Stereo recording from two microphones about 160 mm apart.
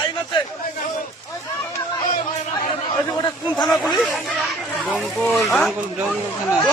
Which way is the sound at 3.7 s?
5° left (ahead or behind).